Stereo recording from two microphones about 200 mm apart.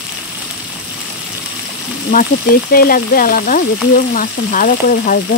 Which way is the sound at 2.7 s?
45° left (ahead or behind).